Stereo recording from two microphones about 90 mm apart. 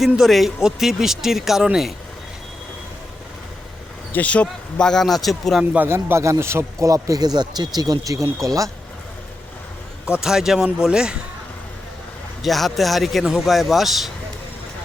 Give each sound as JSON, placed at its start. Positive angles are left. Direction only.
{"t": 0.0, "sound": "speech", "side_deg": 0}
{"t": 4.1, "sound": "speech", "side_deg": 15}
{"t": 5.7, "sound": "a man's voice", "side_deg": -25}
{"t": 10.2, "sound": "speech", "side_deg": -5}
{"t": 12.4, "sound": "speech", "side_deg": 0}